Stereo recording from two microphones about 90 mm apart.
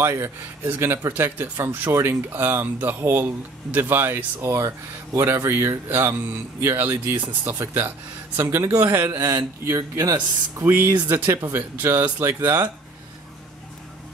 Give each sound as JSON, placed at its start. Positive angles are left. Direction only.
{"t": 0.0, "sound": "a man's voice", "side_deg": -25}